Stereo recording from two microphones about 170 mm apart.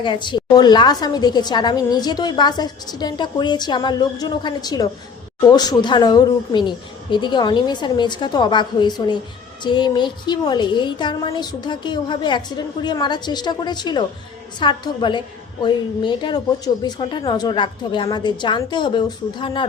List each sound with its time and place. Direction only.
0.0 s a woman's voice: 30° left (ahead or behind)